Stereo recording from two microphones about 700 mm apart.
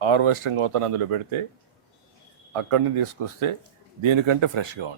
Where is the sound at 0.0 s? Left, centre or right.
Right.